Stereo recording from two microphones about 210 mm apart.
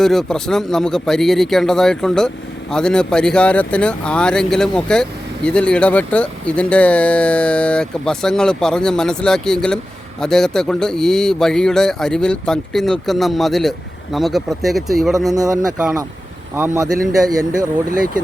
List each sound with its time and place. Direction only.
0.0 s speech: centre (ahead or behind)
16.6 s speech: 10° right (ahead or behind)